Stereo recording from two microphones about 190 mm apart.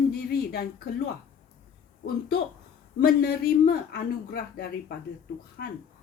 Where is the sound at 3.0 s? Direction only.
55° left (ahead or behind).